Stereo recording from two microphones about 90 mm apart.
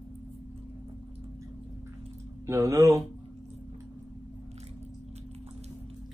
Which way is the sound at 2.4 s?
35° right (ahead or behind).